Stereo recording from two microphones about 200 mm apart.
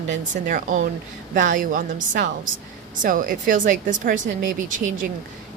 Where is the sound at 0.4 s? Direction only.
40° right (ahead or behind).